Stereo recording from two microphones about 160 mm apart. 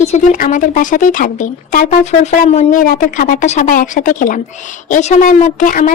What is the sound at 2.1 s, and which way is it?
A woman's voice, 45° left (ahead or behind).